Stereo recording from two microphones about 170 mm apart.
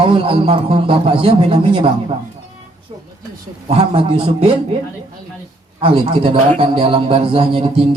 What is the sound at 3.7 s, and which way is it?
Speech, 35° right (ahead or behind).